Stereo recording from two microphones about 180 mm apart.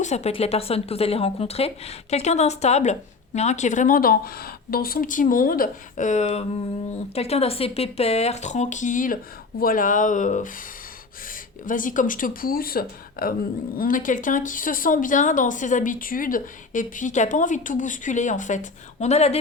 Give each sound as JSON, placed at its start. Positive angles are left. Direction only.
{"t": 0.0, "sound": "speech", "side_deg": 40}